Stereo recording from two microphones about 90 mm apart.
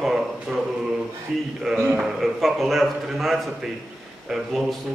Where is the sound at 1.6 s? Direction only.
5° right (ahead or behind).